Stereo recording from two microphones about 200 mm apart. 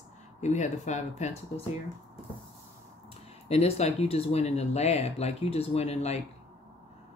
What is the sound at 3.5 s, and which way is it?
Speech, 30° left (ahead or behind).